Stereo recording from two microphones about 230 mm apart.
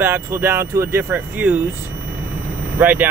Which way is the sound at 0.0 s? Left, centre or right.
Centre.